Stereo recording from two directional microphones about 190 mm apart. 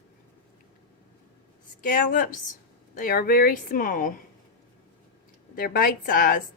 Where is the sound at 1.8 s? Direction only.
45° left (ahead or behind).